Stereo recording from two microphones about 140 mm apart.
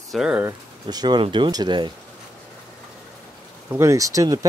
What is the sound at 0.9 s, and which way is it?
Speech, 30° right (ahead or behind).